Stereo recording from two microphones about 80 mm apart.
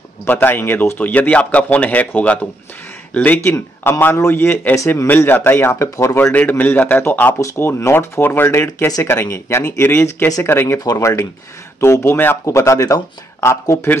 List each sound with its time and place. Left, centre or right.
0.3 s speech: left
3.4 s a man's voice: left
4.7 s speech: left
5.0 s speech: left
6.6 s speech: centre
11.0 s speech: left